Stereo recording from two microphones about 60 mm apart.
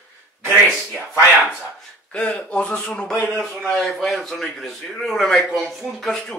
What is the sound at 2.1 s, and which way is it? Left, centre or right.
Speech, centre.